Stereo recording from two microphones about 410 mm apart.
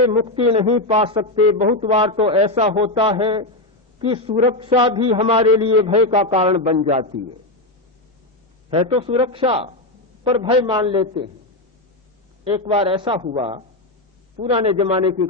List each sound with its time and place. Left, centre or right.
0.0 s a man's voice: centre
8.7 s a man's voice: centre
12.5 s a man's voice: centre